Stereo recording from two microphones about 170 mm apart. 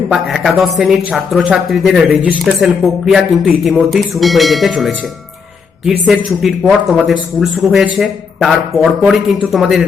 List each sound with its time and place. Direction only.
0.1 s speech: centre (ahead or behind)
6.1 s speech: centre (ahead or behind)